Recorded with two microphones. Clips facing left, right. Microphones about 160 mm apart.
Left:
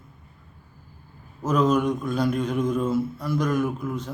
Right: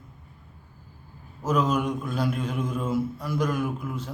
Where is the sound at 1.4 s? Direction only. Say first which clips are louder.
Left 3 dB; 10° right (ahead or behind).